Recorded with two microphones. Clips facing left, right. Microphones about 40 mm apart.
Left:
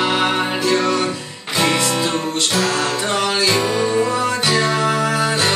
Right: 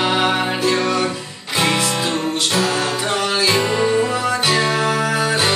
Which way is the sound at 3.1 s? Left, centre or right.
Centre.